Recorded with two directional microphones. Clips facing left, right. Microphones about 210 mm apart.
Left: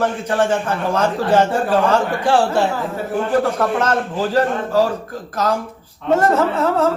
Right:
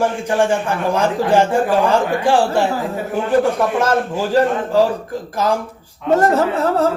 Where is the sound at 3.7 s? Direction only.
10° right (ahead or behind).